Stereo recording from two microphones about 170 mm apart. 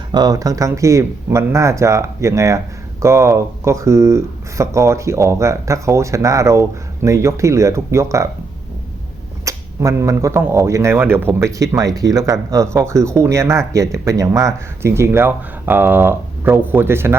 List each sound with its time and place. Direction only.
0.1 s speech: 25° right (ahead or behind)
9.4 s speech: 20° right (ahead or behind)